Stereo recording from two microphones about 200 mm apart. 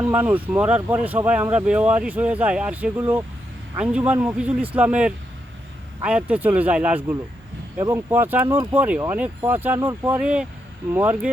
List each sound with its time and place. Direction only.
0.0 s speech: 10° right (ahead or behind)